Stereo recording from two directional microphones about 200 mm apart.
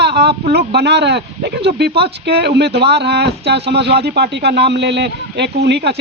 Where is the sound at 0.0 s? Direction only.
55° right (ahead or behind).